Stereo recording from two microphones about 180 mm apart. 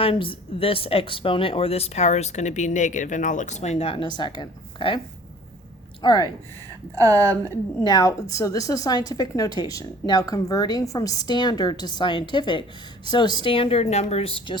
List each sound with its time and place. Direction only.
0.0 s a woman's voice: 30° left (ahead or behind)
6.0 s speech: 25° left (ahead or behind)
7.1 s a woman's voice: 10° left (ahead or behind); by 14.6 s 30° left (ahead or behind)